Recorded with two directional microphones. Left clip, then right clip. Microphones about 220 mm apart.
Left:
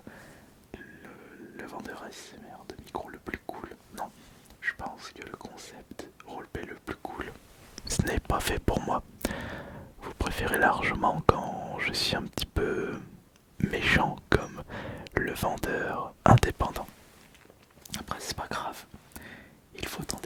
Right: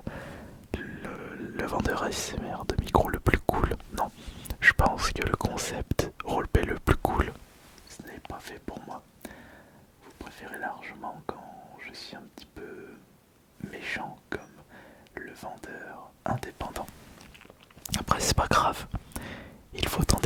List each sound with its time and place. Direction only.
0.7 s whispering: 35° right (ahead or behind)
7.8 s whispering: 50° left (ahead or behind)
13.6 s whispering: 40° left (ahead or behind)
17.9 s whispering: 30° right (ahead or behind)
19.1 s a sound: 25° right (ahead or behind)